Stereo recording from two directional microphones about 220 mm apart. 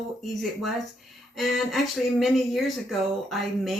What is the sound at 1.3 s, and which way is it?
Speech, centre (ahead or behind).